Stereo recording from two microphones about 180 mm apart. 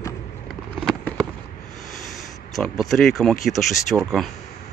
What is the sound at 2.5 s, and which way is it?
Speech, centre (ahead or behind).